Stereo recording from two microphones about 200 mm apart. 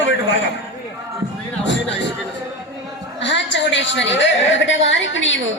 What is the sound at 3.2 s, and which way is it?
A woman's voice, 65° left (ahead or behind).